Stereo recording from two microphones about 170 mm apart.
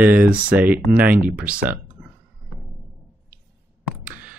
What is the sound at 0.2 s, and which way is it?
Speech, 10° right (ahead or behind).